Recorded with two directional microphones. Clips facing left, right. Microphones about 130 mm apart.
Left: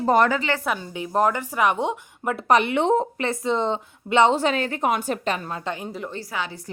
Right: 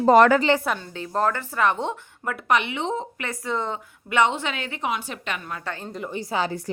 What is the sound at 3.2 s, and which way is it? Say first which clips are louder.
A woman's voice: left 5 dB; 25° left (ahead or behind).